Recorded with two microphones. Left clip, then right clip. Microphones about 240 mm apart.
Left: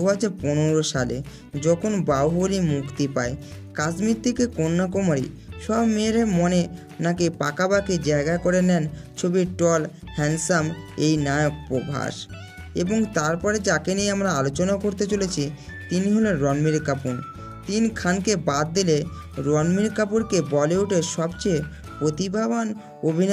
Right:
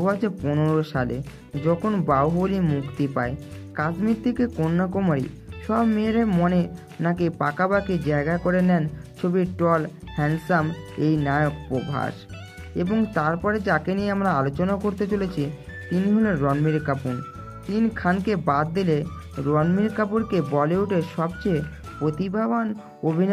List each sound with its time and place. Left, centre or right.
0.0 s speech: left